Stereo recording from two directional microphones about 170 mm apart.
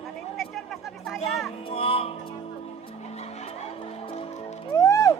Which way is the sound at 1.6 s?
30° left (ahead or behind).